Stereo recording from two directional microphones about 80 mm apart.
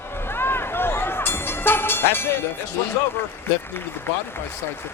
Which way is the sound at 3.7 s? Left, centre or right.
Left.